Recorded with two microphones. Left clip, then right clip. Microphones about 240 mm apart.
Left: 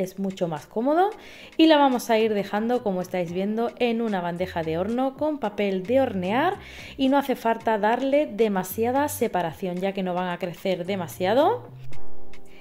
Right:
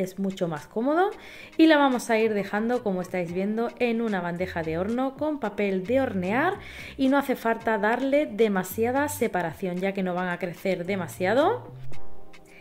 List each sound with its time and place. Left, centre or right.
0.0 s a woman's voice: centre